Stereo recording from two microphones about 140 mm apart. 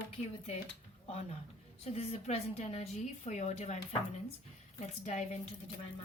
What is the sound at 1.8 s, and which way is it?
A woman's voice, 50° left (ahead or behind).